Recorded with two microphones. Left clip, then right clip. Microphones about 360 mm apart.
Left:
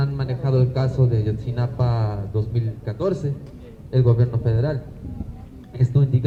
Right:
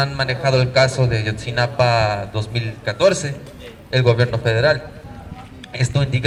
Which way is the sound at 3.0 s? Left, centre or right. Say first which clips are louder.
Right 8 dB; right.